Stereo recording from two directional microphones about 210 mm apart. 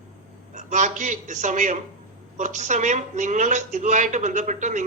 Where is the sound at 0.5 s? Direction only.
35° right (ahead or behind).